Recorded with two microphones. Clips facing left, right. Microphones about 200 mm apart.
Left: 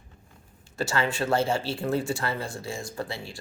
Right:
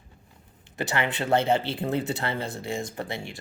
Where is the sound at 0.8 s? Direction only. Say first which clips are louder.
Left 1 dB; 20° right (ahead or behind).